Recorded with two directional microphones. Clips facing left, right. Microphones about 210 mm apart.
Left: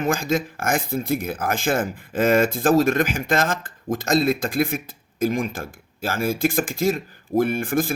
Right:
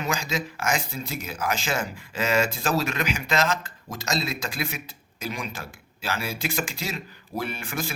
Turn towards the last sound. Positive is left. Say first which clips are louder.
# left 10 dB
turn(degrees=50)  # may be behind; listen again after turning